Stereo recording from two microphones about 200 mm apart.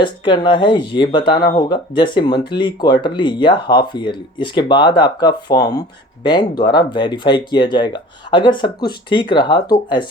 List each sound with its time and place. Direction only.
0.0 s speech: 25° left (ahead or behind)